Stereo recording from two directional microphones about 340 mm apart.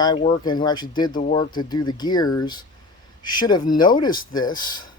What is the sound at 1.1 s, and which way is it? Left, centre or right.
Speech, left.